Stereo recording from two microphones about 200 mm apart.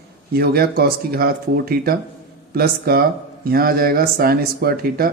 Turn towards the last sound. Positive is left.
turn(degrees=-50)  # may be behind; listen again after turning